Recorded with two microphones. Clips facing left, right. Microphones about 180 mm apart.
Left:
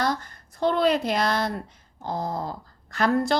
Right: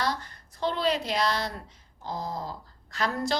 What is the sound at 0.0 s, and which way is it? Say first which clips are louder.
A woman's voice: left 4 dB; 50° left (ahead or behind).